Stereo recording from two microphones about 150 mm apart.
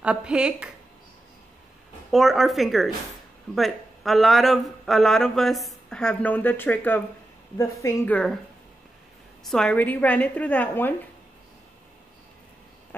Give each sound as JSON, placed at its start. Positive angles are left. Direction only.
{"t": 0.0, "sound": "a woman's voice", "side_deg": -5}
{"t": 2.0, "sound": "a man's voice", "side_deg": 0}
{"t": 9.5, "sound": "a woman's voice", "side_deg": 5}